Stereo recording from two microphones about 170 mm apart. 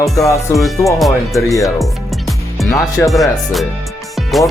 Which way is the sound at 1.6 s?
Centre (ahead or behind).